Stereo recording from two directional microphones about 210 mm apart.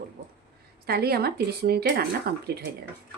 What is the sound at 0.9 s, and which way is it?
A woman's voice, 50° right (ahead or behind).